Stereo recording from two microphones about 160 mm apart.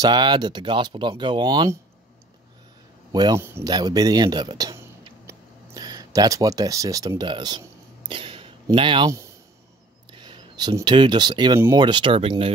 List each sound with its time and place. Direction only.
0.0 s speech: 25° right (ahead or behind)
3.1 s speech: 25° right (ahead or behind)
10.1 s speech: 30° right (ahead or behind)